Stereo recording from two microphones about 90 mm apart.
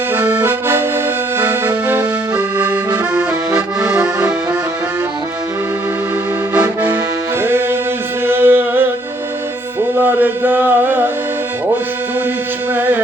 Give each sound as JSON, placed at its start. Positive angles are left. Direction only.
{"t": 0.1, "sound": "accordion", "side_deg": -20}
{"t": 7.4, "sound": "music", "side_deg": -25}
{"t": 12.7, "sound": "music", "side_deg": -20}